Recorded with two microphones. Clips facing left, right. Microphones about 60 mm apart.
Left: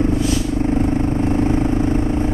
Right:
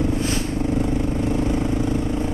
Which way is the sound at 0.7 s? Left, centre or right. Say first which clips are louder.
Left 4 dB; left.